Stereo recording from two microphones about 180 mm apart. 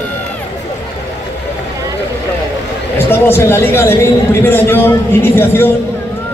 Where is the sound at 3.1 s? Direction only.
15° left (ahead or behind).